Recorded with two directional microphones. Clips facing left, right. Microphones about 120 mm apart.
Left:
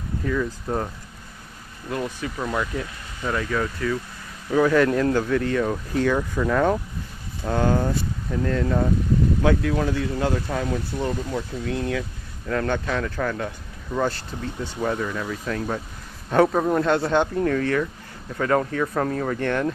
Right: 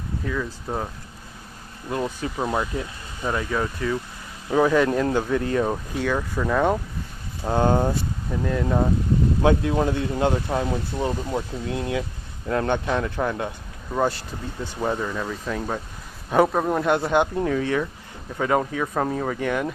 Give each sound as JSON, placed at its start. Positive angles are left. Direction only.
{"t": 0.3, "sound": "speech", "side_deg": -5}
{"t": 2.2, "sound": "speech", "side_deg": -25}
{"t": 5.9, "sound": "speech", "side_deg": -5}
{"t": 7.4, "sound": "speech", "side_deg": -25}
{"t": 8.3, "sound": "speech", "side_deg": -10}
{"t": 8.6, "sound": "speech", "side_deg": -25}
{"t": 14.8, "sound": "speech", "side_deg": -15}